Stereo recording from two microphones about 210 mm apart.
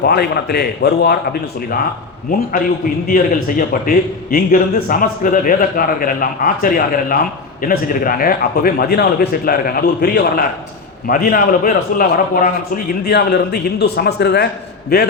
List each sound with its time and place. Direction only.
0.0 s a man's voice: 50° left (ahead or behind)